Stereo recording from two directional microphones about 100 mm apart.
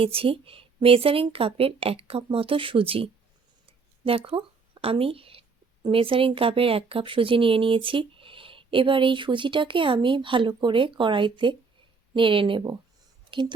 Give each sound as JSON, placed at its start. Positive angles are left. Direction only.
{"t": 0.0, "sound": "a woman's voice", "side_deg": -65}
{"t": 4.0, "sound": "a sound", "side_deg": -65}
{"t": 5.9, "sound": "speech", "side_deg": -65}